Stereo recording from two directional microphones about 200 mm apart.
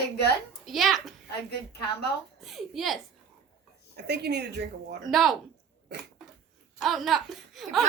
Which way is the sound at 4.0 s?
55° right (ahead or behind).